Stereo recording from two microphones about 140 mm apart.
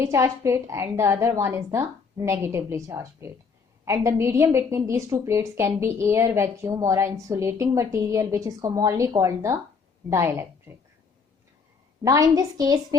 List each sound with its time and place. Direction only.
0.0 s a woman's voice: 20° right (ahead or behind)
12.0 s a woman's voice: 25° right (ahead or behind)